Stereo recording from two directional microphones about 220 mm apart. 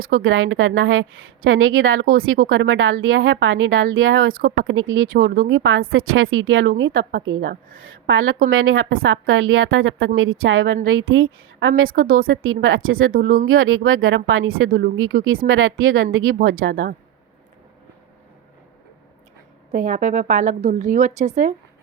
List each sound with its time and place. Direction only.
0.1 s a woman's voice: 65° right (ahead or behind)
4.4 s a woman's voice: 50° right (ahead or behind)
5.1 s a woman's voice: 40° right (ahead or behind); by 11.7 s 65° right (ahead or behind)
12.0 s a woman's voice: 40° right (ahead or behind)
12.3 s a woman's voice: 65° right (ahead or behind)
13.1 s a woman's voice: 40° right (ahead or behind); by 16.7 s 60° right (ahead or behind)
19.7 s a woman's voice: 35° right (ahead or behind)